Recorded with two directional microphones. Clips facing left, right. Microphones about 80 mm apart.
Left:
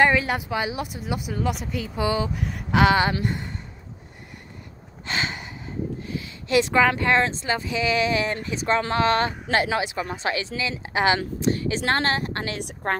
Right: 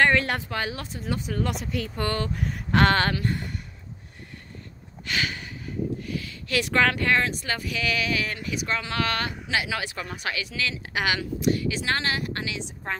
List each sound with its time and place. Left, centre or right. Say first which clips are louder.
0.0 s speech: left 2 dB; centre
5.0 s a sound: left 1 dB; left
6.0 s a woman's voice: left 2 dB; left
9.8 s a woman's voice: left 6 dB; centre; by 12.5 s left
12.5 s a woman's voice: left 6 dB; left